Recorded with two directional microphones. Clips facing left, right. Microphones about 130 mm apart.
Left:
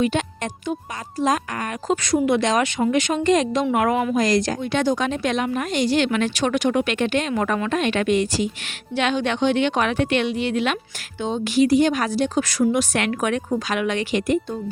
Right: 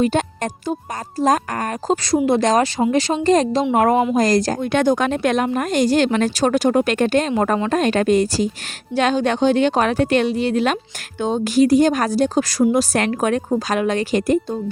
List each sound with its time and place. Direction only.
0.0 s a woman's voice: 40° right (ahead or behind)
2.2 s a woman's voice: 40° right (ahead or behind)